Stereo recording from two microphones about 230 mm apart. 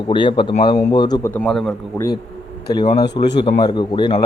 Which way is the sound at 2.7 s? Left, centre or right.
Centre.